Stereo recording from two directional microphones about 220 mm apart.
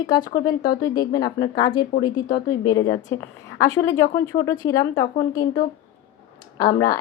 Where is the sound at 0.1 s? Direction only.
20° left (ahead or behind).